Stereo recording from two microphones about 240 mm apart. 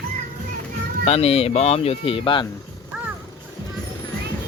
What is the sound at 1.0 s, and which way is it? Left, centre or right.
Speech, left.